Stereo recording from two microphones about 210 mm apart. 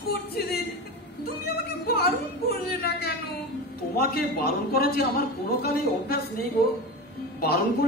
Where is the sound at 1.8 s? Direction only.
45° left (ahead or behind).